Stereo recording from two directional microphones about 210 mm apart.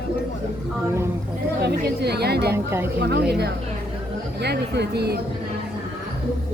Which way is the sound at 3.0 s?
50° right (ahead or behind).